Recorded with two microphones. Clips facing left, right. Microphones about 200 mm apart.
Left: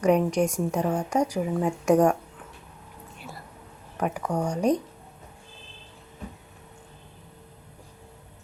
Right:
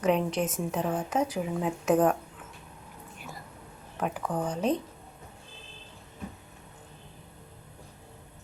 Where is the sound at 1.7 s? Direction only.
10° left (ahead or behind).